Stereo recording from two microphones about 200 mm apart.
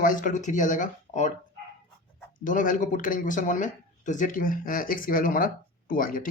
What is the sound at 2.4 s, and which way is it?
Speech, 40° left (ahead or behind).